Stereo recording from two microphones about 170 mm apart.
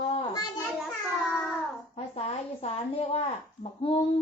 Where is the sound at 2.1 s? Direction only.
35° left (ahead or behind).